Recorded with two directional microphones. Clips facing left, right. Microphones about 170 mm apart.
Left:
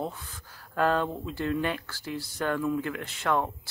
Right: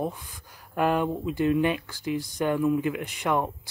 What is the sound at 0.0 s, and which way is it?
Speech, 15° right (ahead or behind).